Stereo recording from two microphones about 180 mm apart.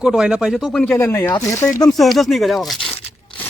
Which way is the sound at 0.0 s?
5° right (ahead or behind).